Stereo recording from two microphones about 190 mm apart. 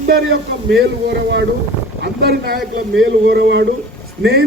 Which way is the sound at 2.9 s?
70° right (ahead or behind).